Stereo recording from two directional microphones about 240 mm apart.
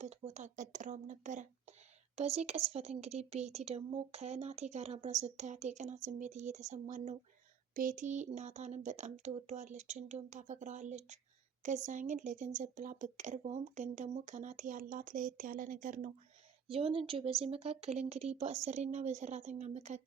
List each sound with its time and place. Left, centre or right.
0.0 s a woman's voice: right
16.6 s a woman's voice: right